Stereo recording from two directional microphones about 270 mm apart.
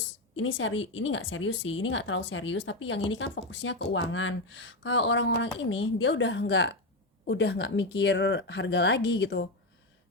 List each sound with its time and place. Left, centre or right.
0.3 s speech: left